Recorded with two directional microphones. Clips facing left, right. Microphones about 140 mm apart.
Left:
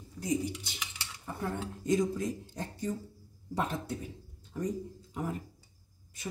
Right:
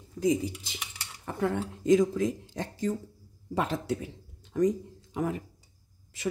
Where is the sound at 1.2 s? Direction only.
90° right.